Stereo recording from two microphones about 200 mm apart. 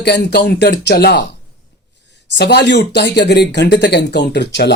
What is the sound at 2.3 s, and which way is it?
Speech, 55° left (ahead or behind).